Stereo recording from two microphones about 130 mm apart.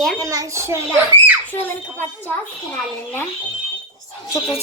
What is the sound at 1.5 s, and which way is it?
Speech, 15° left (ahead or behind).